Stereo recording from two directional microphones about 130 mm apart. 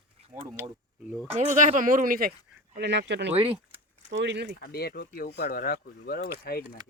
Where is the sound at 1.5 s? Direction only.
80° right.